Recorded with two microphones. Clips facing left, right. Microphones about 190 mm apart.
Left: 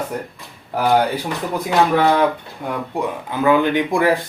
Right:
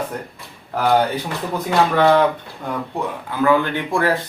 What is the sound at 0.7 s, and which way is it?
Speech, 10° left (ahead or behind).